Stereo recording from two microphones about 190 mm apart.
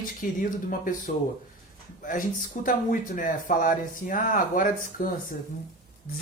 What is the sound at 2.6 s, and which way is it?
Speech, 45° left (ahead or behind).